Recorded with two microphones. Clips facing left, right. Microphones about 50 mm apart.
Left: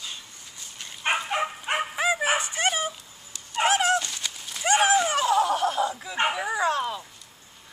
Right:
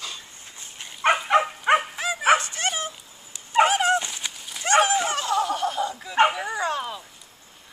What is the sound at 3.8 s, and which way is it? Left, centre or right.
Dog, centre.